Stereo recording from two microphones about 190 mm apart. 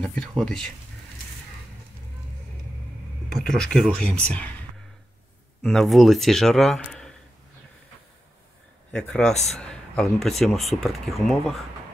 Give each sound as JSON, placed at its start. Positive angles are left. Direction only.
{"t": 0.4, "sound": "speech", "side_deg": 5}
{"t": 3.3, "sound": "speech", "side_deg": 5}
{"t": 5.6, "sound": "speech", "side_deg": 0}
{"t": 8.9, "sound": "speech", "side_deg": 5}
{"t": 9.3, "sound": "speech", "side_deg": 35}
{"t": 9.6, "sound": "speech", "side_deg": 0}